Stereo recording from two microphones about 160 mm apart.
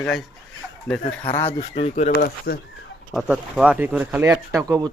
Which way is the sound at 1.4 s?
40° left (ahead or behind).